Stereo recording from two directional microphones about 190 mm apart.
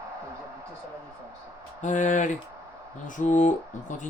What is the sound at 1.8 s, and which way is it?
Speech, 40° left (ahead or behind).